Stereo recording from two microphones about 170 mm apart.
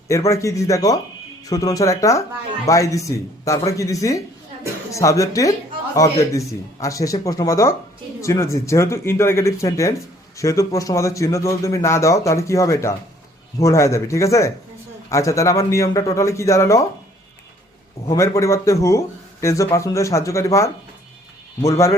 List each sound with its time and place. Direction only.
0.1 s speech: 15° left (ahead or behind)
18.1 s speech: 15° left (ahead or behind)